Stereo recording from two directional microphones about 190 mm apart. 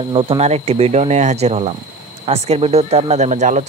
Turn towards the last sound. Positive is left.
turn(degrees=-40)  # may be behind; listen again after turning